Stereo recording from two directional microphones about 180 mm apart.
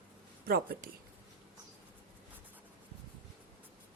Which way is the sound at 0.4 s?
55° right (ahead or behind).